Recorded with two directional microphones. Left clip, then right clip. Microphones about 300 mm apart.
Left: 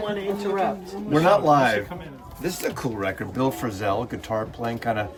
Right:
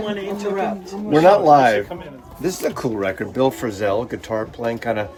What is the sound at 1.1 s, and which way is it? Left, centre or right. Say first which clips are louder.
Speech: right 6 dB; centre.